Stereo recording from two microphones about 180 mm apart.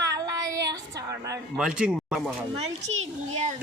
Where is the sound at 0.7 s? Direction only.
20° right (ahead or behind).